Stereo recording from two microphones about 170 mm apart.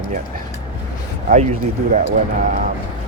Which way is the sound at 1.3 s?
40° right (ahead or behind).